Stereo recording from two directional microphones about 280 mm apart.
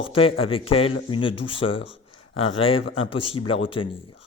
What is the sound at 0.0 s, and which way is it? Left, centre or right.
Speech, centre.